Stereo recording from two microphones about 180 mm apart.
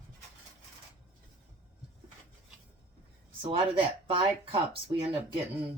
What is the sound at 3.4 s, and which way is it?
Speech, 30° right (ahead or behind).